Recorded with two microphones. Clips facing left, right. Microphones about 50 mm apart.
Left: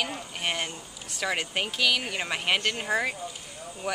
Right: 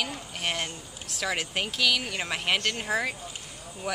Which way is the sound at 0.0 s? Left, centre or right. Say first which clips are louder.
Left 1 dB; centre.